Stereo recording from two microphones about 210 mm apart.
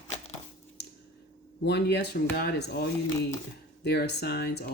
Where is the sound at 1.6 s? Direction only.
55° left (ahead or behind).